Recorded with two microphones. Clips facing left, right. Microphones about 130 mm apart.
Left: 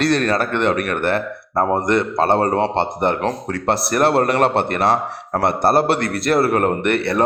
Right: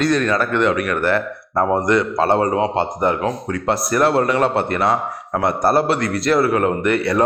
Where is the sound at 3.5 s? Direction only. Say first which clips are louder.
Even; 70° left (ahead or behind).